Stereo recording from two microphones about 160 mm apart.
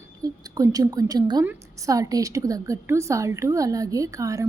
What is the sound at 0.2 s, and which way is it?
Speech, 20° right (ahead or behind).